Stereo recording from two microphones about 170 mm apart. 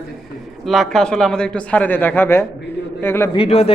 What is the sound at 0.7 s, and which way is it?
A man's voice, centre (ahead or behind).